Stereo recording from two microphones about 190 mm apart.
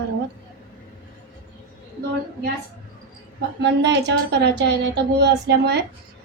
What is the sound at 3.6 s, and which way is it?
A woman's voice, 65° right (ahead or behind).